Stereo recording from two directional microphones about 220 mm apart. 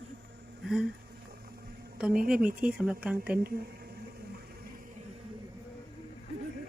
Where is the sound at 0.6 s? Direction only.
5° right (ahead or behind).